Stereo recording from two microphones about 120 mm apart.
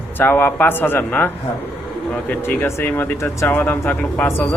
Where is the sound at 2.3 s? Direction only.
15° left (ahead or behind).